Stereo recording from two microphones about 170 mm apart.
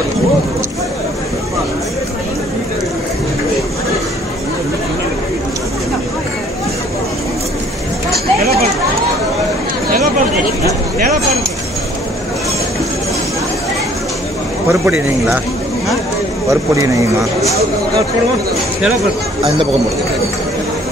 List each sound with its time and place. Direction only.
8.1 s a sound: 65° right (ahead or behind)
14.7 s speech: 15° right (ahead or behind)
16.4 s speech: 20° right (ahead or behind)